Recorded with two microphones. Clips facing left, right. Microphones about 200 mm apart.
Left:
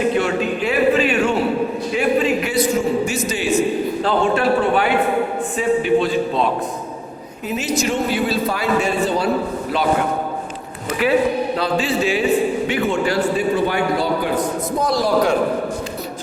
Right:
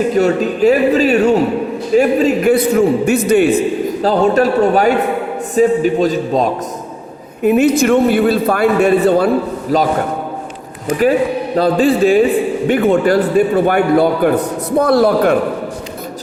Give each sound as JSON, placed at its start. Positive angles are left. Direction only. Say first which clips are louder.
{"t": 0.2, "sound": "a man's voice", "louder": "right 7 dB", "side_deg": -40}
{"t": 4.0, "sound": "speech", "louder": "right 6 dB", "side_deg": -40}
{"t": 7.4, "sound": "a man's voice", "louder": "right 11 dB", "side_deg": -60}
{"t": 9.7, "sound": "speech", "louder": "right 8 dB", "side_deg": -40}
{"t": 11.5, "sound": "a man's voice", "louder": "right 7 dB", "side_deg": -50}